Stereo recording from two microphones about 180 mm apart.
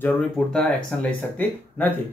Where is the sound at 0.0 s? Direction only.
5° left (ahead or behind).